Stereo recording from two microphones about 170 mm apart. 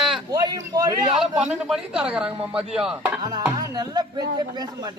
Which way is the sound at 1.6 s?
5° right (ahead or behind).